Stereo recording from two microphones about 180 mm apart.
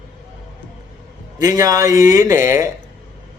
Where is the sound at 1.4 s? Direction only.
20° right (ahead or behind).